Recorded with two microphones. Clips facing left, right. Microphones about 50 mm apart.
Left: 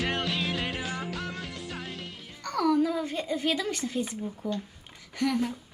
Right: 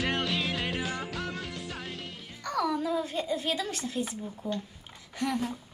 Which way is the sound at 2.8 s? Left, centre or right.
Left.